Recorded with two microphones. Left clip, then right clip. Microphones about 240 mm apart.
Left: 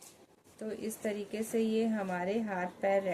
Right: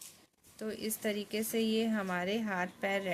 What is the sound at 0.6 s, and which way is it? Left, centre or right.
Speech, right.